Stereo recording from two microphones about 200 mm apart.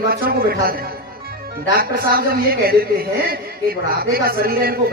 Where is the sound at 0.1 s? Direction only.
50° right (ahead or behind).